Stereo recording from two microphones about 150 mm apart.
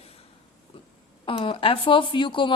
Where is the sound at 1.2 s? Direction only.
35° left (ahead or behind).